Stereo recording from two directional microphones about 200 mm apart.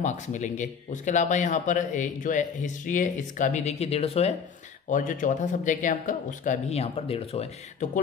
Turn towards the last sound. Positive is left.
turn(degrees=35)  # may be behind; listen again after turning